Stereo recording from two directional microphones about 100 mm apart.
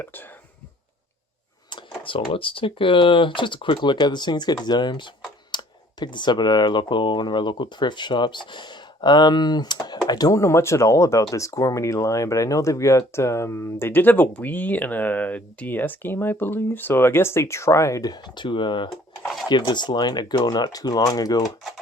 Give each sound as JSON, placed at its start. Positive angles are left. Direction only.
{"t": 0.0, "sound": "speech", "side_deg": 20}
{"t": 2.0, "sound": "speech", "side_deg": 60}
{"t": 9.7, "sound": "computer keyboard", "side_deg": 45}
{"t": 10.1, "sound": "speech", "side_deg": 40}